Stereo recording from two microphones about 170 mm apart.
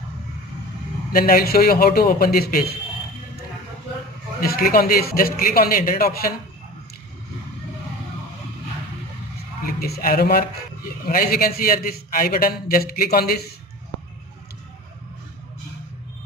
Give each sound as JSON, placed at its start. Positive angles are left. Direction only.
{"t": 1.1, "sound": "a man's voice", "side_deg": 60}
{"t": 4.4, "sound": "a man's voice", "side_deg": 60}
{"t": 9.8, "sound": "a man's voice", "side_deg": 65}